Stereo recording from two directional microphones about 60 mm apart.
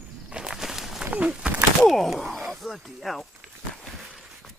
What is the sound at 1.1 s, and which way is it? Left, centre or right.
Speech, centre.